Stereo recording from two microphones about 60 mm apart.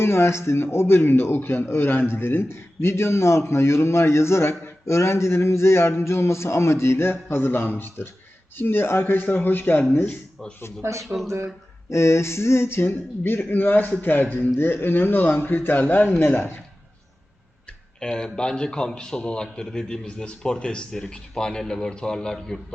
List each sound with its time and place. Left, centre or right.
0.0 s a man's voice: left
11.0 s speech: centre
11.3 s speech: right
11.9 s a man's voice: left
18.0 s speech: centre